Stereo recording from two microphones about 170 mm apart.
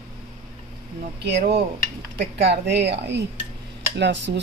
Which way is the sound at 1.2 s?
65° right (ahead or behind).